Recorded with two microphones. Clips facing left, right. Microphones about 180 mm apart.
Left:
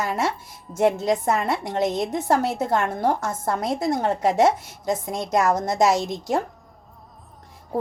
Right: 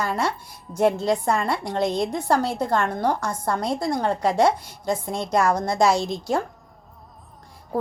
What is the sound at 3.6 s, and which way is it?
A woman's voice, 20° left (ahead or behind).